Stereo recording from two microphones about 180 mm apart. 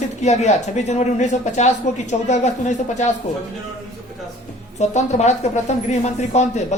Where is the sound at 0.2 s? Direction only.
40° left (ahead or behind).